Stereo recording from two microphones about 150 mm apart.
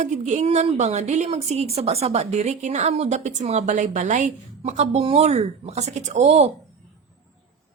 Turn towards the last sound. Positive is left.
turn(degrees=-50)  # may be behind; listen again after turning